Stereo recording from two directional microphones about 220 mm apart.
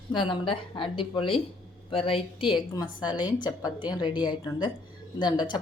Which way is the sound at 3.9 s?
20° left (ahead or behind).